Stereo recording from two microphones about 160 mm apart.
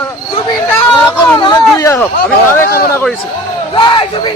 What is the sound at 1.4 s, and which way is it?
Speech, 25° left (ahead or behind).